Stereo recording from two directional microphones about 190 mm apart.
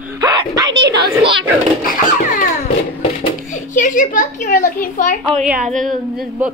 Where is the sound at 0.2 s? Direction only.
20° right (ahead or behind).